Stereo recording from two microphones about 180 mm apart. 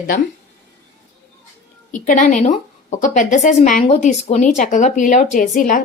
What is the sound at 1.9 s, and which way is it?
A woman's voice, 45° left (ahead or behind).